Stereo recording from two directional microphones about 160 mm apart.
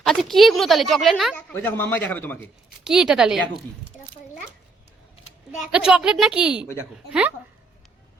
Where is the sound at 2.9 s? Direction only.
5° right (ahead or behind).